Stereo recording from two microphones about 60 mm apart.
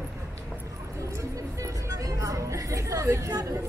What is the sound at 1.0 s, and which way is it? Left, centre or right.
Music, right.